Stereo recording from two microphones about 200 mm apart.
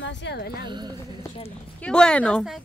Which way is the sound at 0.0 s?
60° left (ahead or behind).